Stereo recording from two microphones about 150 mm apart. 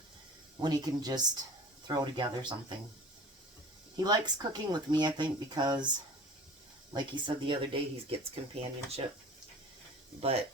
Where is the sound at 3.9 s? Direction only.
30° right (ahead or behind).